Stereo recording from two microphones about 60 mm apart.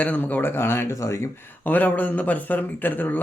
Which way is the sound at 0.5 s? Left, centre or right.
Left.